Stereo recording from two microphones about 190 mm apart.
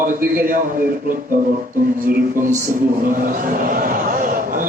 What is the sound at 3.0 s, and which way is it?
A man's voice, 45° right (ahead or behind).